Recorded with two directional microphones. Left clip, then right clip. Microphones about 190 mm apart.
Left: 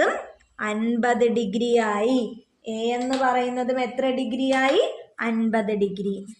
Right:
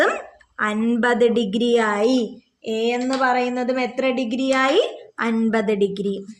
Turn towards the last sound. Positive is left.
turn(degrees=-40)  # may be behind; listen again after turning